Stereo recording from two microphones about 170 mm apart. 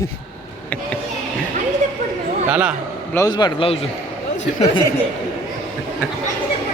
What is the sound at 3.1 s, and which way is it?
Speech, 20° left (ahead or behind).